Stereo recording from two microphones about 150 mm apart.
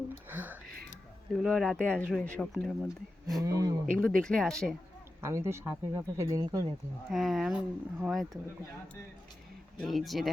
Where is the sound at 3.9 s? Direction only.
5° left (ahead or behind).